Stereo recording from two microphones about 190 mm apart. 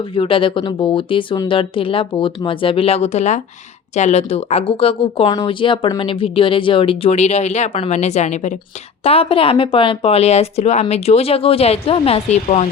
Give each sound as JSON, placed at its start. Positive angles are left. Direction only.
{"t": 0.1, "sound": "speech", "side_deg": 30}